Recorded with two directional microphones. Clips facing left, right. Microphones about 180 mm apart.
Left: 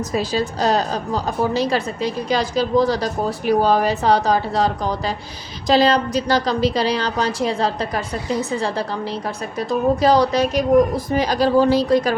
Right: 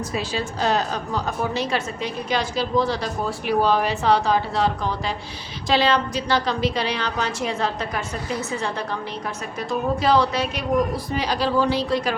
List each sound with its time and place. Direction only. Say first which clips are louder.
0.1 s a woman's voice: left 5 dB; 40° left (ahead or behind)